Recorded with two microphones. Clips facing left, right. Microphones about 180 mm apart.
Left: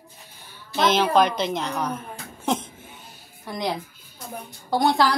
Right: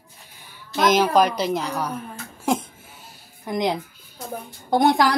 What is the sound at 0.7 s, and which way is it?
A woman's voice, 10° right (ahead or behind).